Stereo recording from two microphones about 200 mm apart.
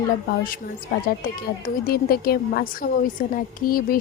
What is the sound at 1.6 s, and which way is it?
Speech, 50° left (ahead or behind).